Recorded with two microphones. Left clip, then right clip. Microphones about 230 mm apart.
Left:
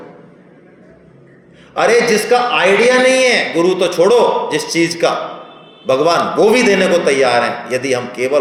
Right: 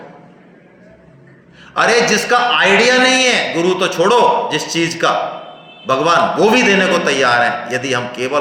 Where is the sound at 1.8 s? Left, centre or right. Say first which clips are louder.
Left 1 dB; centre.